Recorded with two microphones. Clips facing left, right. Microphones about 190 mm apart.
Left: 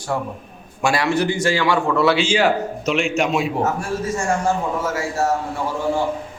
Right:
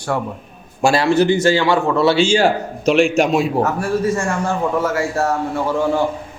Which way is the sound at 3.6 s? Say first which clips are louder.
Right 4 dB; 60° right (ahead or behind).